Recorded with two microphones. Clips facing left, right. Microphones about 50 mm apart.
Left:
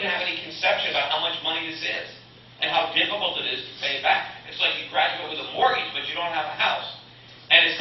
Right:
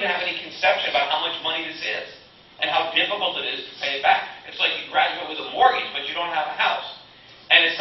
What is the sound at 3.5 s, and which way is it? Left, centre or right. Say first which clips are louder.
Speech: right 1 dB; centre.